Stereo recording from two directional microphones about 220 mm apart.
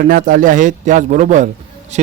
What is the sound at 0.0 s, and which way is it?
A man's voice, 40° right (ahead or behind).